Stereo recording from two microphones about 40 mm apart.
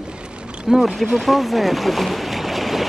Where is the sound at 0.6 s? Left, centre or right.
Centre.